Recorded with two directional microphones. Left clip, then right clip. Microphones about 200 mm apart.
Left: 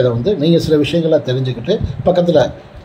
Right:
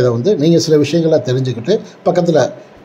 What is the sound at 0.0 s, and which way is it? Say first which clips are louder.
A man's voice: right 2 dB; 25° right (ahead or behind).